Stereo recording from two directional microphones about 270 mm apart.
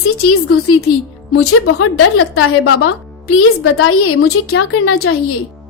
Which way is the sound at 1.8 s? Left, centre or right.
Left.